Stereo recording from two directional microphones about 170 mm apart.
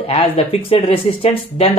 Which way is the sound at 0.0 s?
35° left (ahead or behind).